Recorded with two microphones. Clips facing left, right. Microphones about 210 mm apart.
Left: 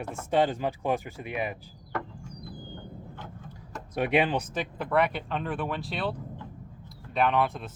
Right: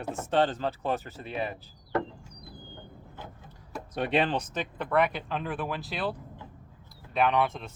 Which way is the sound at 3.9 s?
10° left (ahead or behind).